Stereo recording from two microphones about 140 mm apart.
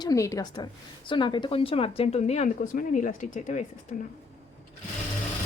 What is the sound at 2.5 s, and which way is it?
Speech, 70° left (ahead or behind).